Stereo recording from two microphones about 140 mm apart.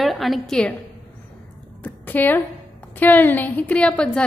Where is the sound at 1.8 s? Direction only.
10° left (ahead or behind).